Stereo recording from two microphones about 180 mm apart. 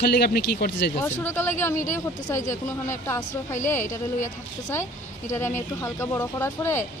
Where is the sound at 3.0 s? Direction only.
15° left (ahead or behind).